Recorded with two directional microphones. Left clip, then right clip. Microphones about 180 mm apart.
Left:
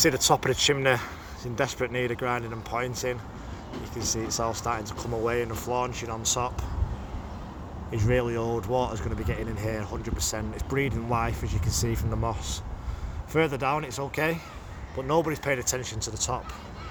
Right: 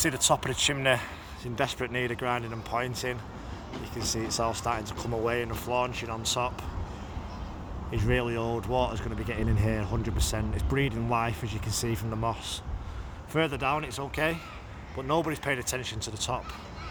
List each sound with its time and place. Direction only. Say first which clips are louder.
0.0 s speech: left 4 dB; 5° left (ahead or behind)
7.9 s speech: left 3 dB; 5° left (ahead or behind)